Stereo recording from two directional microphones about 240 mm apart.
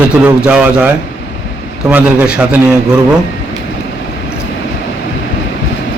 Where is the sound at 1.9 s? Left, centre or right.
Centre.